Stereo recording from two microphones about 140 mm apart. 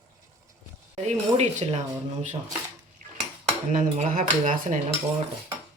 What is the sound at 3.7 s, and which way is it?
Speech, 75° right (ahead or behind).